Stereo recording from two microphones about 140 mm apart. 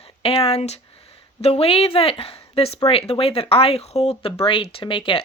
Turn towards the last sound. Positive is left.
turn(degrees=40)  # may be behind; listen again after turning